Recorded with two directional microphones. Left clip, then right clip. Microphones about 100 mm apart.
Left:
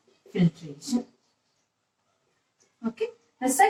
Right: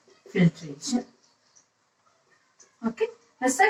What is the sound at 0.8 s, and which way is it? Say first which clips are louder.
Speech: right 1 dB; 30° right (ahead or behind).